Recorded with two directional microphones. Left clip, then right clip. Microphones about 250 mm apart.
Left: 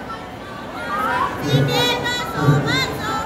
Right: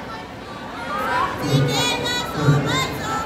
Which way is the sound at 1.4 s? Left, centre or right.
Right.